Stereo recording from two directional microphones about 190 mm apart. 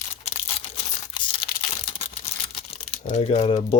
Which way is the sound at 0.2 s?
35° left (ahead or behind).